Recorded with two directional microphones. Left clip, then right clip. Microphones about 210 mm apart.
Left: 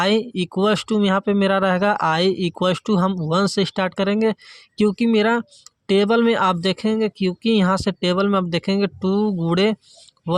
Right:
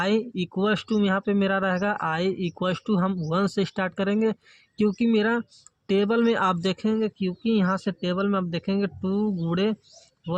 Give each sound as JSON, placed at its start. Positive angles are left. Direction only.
{"t": 0.0, "sound": "speech", "side_deg": 25}